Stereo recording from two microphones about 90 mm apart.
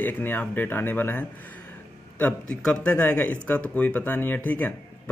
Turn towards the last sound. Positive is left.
turn(degrees=20)  # may be behind; listen again after turning